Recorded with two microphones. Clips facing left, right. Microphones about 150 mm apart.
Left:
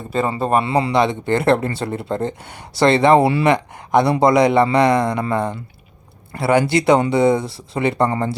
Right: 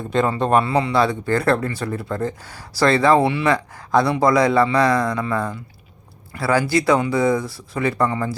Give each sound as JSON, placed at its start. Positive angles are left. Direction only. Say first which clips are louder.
{"t": 0.1, "sound": "a man's voice", "louder": "right 1 dB", "side_deg": 5}
{"t": 0.6, "sound": "speech", "louder": "left 1 dB", "side_deg": 30}